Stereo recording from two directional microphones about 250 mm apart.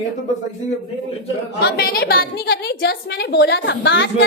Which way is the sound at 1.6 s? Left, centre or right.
Left.